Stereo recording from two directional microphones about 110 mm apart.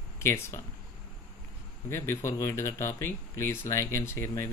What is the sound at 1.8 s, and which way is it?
Speech, 25° left (ahead or behind).